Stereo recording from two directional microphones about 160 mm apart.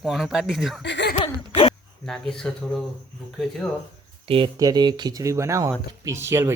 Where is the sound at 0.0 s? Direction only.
Centre (ahead or behind).